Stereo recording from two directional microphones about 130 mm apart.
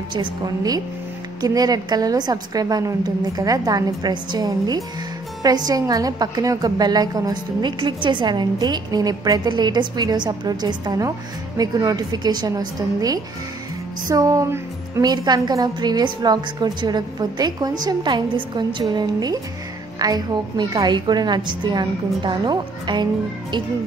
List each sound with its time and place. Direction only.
0.1 s a woman's voice: 35° right (ahead or behind)